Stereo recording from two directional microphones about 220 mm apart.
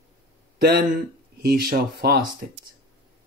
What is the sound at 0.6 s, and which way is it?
Speech, 45° right (ahead or behind).